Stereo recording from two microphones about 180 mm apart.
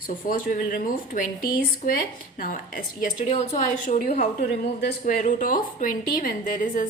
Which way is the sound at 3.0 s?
45° left (ahead or behind).